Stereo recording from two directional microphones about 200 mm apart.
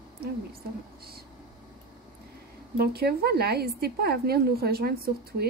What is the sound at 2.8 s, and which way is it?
Speech, 50° right (ahead or behind).